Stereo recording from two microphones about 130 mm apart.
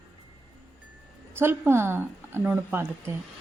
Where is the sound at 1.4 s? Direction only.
20° right (ahead or behind).